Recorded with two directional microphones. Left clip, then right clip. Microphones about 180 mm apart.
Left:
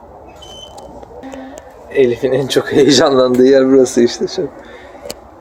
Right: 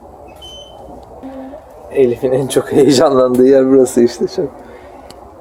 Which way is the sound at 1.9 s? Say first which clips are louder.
Even; centre (ahead or behind).